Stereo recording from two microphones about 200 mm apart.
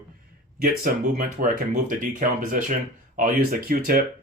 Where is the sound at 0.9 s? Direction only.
45° right (ahead or behind).